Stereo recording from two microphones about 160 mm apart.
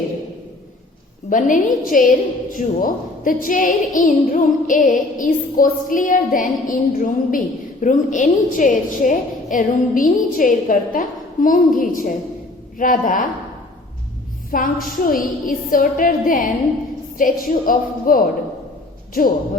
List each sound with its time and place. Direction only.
1.3 s a woman's voice: 55° left (ahead or behind)
14.5 s a woman's voice: 60° left (ahead or behind)